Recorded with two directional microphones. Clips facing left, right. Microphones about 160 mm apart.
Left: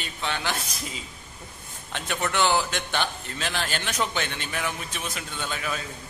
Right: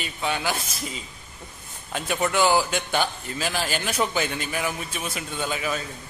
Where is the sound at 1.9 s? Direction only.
5° right (ahead or behind).